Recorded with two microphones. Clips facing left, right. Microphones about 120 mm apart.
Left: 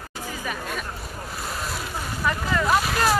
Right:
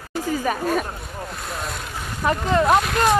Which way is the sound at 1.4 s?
Centre (ahead or behind).